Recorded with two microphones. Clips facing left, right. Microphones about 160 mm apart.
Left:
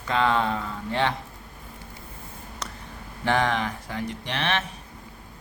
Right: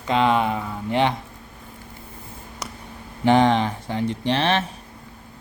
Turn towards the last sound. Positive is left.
turn(degrees=-30)  # may be behind; listen again after turning